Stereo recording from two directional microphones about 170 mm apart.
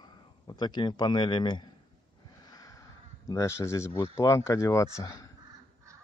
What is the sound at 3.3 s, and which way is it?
Speech, 15° left (ahead or behind).